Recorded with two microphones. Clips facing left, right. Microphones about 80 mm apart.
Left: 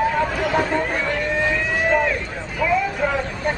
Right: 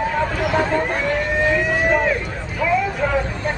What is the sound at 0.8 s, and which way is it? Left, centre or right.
Vehicle, centre.